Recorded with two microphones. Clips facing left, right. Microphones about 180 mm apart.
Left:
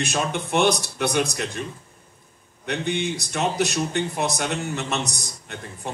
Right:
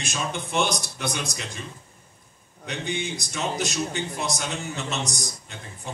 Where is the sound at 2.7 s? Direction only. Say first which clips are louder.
Left 5 dB; 60° left (ahead or behind).